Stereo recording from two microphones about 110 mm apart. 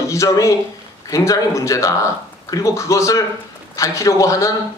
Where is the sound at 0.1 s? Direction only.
30° left (ahead or behind).